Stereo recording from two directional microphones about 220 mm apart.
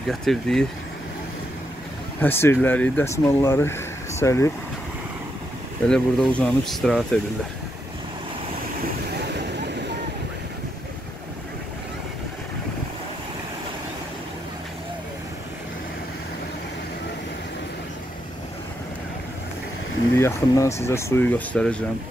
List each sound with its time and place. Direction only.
0.1 s speech: centre (ahead or behind)
2.1 s speech: 10° left (ahead or behind)
5.9 s speech: 5° left (ahead or behind)
9.3 s a sound: 50° right (ahead or behind)
20.2 s speech: 15° left (ahead or behind)